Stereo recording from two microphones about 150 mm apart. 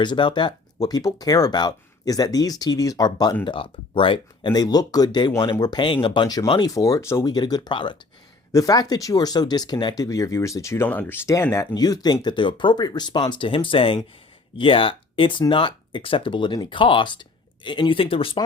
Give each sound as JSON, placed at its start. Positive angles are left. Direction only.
{"t": 0.0, "sound": "speech", "side_deg": 30}